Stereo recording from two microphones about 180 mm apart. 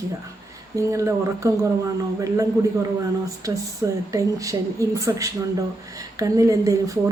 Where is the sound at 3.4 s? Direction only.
20° right (ahead or behind).